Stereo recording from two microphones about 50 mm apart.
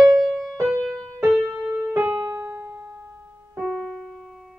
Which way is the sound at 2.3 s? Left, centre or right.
Right.